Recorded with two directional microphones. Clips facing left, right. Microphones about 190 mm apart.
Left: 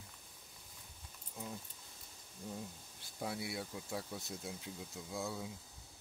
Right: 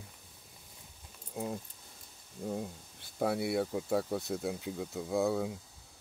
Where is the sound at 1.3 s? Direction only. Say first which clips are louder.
Right 9 dB; 60° right (ahead or behind).